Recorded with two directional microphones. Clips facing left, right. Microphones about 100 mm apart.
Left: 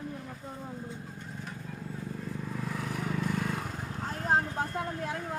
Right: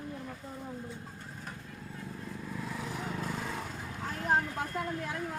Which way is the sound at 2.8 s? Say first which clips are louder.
Left 5 dB; 60° left (ahead or behind).